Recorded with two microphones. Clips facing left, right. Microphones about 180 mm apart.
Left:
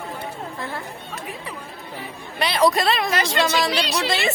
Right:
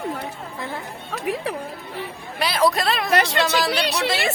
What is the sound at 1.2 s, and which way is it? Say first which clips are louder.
Speech: right 12 dB; 75° right (ahead or behind).